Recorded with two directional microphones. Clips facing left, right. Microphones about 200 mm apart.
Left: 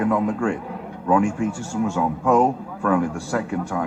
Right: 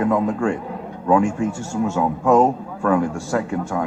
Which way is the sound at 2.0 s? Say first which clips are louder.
Right 3 dB; 40° right (ahead or behind).